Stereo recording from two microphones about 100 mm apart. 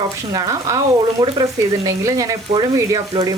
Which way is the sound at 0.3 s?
40° right (ahead or behind).